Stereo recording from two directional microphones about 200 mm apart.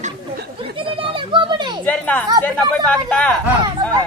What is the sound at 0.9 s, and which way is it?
Children playing, 25° right (ahead or behind).